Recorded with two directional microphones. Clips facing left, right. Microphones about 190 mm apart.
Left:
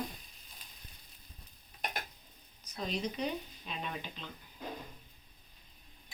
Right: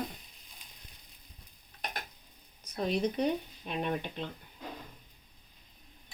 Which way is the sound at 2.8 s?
55° right (ahead or behind).